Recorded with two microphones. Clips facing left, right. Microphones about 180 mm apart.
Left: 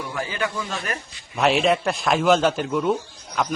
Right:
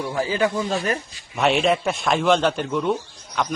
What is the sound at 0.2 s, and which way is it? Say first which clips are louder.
Speech: right 6 dB; 30° right (ahead or behind).